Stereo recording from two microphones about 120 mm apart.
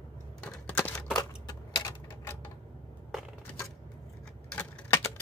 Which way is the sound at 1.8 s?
25° left (ahead or behind).